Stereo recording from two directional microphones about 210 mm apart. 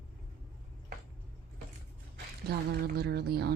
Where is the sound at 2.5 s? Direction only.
50° right (ahead or behind).